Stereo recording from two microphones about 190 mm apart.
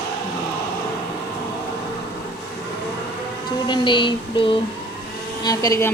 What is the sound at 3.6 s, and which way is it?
Child singing, 25° left (ahead or behind).